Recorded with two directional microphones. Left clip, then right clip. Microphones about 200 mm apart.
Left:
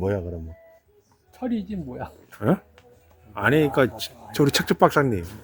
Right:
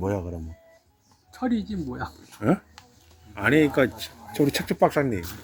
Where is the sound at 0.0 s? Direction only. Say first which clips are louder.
Left 2 dB; 25° left (ahead or behind); by 5.2 s 45° left (ahead or behind).